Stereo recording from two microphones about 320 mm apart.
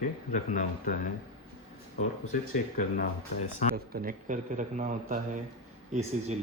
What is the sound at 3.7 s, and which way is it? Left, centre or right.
A man's voice, right.